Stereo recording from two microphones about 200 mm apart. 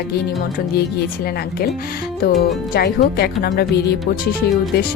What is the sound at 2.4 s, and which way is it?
Speech, 50° left (ahead or behind).